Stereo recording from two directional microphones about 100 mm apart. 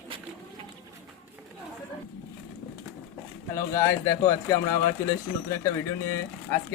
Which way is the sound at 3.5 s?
30° left (ahead or behind).